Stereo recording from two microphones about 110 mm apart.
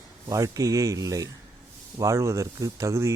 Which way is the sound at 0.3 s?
30° right (ahead or behind).